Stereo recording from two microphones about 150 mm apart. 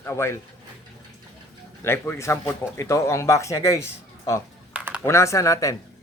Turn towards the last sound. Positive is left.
turn(degrees=20)  # may be behind; listen again after turning